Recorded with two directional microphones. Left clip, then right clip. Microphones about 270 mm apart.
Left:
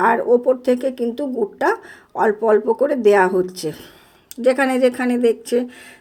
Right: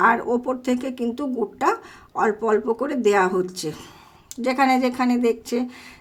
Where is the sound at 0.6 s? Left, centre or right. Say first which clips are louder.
Left 6 dB; centre.